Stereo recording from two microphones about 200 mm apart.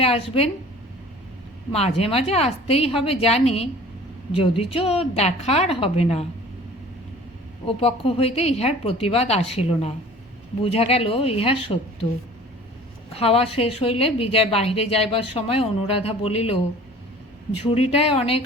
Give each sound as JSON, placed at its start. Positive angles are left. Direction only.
{"t": 0.0, "sound": "a woman's voice", "side_deg": 30}
{"t": 2.0, "sound": "a woman's voice", "side_deg": 30}
{"t": 7.8, "sound": "a woman's voice", "side_deg": 30}
{"t": 13.1, "sound": "speech", "side_deg": 30}
{"t": 17.7, "sound": "speech", "side_deg": 30}